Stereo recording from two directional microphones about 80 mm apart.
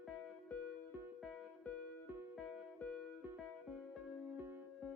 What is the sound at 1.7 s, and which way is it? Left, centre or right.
Music, centre.